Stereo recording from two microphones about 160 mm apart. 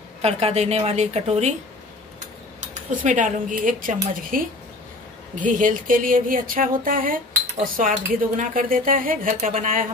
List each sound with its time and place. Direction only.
0.2 s a woman's voice: 40° right (ahead or behind)
2.7 s speech: 50° right (ahead or behind)